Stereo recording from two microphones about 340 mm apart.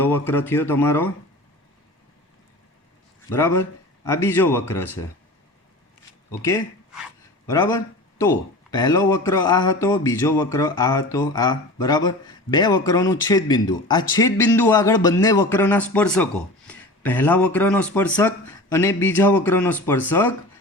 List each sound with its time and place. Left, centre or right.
0.0 s speech: centre
3.2 s speech: centre
6.4 s speech: centre